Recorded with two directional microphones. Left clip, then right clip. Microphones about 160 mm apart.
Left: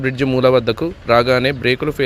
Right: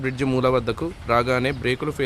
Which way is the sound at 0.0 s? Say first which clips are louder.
Left 7 dB; 20° left (ahead or behind).